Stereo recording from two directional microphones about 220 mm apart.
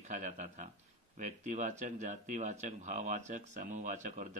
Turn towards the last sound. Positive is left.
turn(degrees=-35)  # may be behind; listen again after turning